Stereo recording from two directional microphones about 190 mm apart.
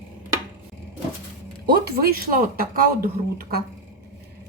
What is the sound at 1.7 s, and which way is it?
Speech, 50° right (ahead or behind).